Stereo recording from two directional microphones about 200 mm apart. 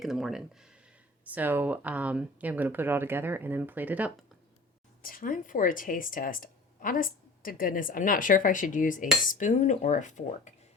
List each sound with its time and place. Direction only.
0.0 s speech: centre (ahead or behind)
5.0 s a woman's voice: 45° left (ahead or behind)